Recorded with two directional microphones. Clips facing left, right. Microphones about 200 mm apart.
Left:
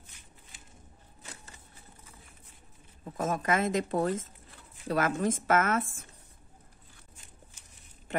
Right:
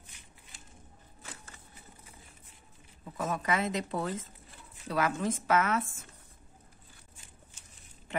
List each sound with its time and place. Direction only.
3.2 s speech: 45° left (ahead or behind)